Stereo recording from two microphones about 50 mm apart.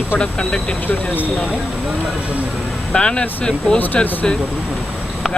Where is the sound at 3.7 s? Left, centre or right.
Left.